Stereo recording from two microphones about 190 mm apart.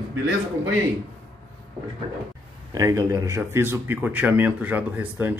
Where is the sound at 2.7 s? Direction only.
15° right (ahead or behind).